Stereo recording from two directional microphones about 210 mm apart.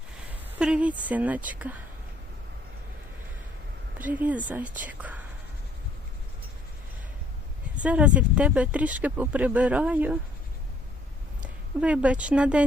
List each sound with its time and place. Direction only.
0.6 s speech: 5° right (ahead or behind)
3.9 s speech: 10° right (ahead or behind)
7.8 s speech: 5° right (ahead or behind)
11.8 s speech: 5° right (ahead or behind)